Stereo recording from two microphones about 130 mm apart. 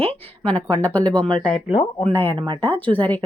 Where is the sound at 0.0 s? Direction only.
15° left (ahead or behind).